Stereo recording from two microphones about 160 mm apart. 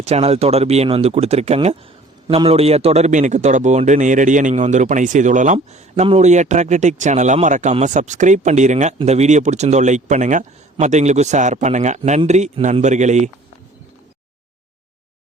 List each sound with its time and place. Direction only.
0.0 s a man's voice: 40° right (ahead or behind)
5.5 s a man's voice: 40° right (ahead or behind)